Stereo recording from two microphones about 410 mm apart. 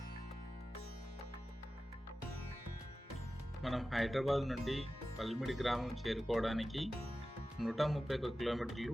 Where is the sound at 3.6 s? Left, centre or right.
Centre.